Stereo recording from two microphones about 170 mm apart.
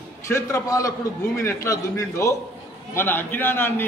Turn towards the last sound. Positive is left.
turn(degrees=10)  # may be behind; listen again after turning